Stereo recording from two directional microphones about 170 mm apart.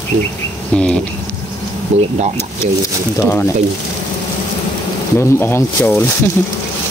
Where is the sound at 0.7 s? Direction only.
5° left (ahead or behind).